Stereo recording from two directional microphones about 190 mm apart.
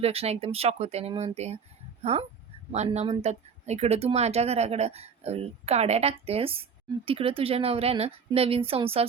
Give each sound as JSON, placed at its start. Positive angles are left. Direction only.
{"t": 0.0, "sound": "speech", "side_deg": -30}
{"t": 2.7, "sound": "speech", "side_deg": -35}